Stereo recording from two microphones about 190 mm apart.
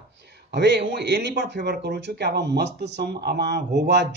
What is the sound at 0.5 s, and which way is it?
A man's voice, 65° right (ahead or behind).